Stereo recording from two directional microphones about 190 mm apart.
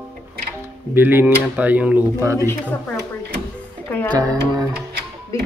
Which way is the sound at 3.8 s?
10° left (ahead or behind).